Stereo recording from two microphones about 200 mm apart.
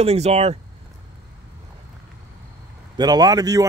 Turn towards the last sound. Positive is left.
turn(degrees=-20)  # may be behind; listen again after turning